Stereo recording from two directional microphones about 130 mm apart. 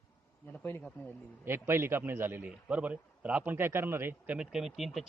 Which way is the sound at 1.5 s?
20° right (ahead or behind).